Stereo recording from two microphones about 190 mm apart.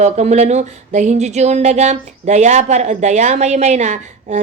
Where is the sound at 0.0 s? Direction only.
35° right (ahead or behind).